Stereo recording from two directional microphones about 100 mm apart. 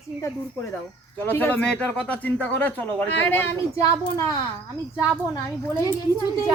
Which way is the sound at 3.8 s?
35° left (ahead or behind).